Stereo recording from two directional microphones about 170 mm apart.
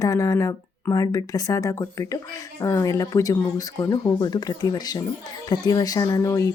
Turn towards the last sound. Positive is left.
turn(degrees=20)  # may be behind; listen again after turning